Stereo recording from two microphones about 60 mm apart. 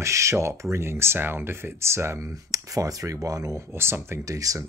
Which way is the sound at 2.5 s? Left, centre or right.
Right.